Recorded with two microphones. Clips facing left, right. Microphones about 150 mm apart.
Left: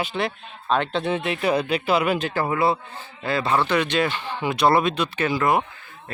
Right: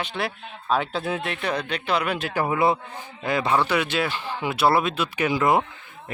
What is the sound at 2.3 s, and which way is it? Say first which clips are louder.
A man's voice: even; 15° right (ahead or behind).